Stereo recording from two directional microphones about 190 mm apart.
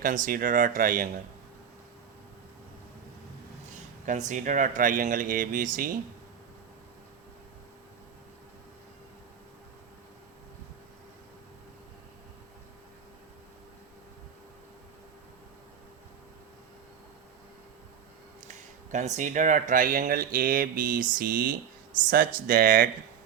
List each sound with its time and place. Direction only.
0.0 s speech: 45° right (ahead or behind)
4.0 s speech: 40° right (ahead or behind)
18.4 s speech: 40° right (ahead or behind)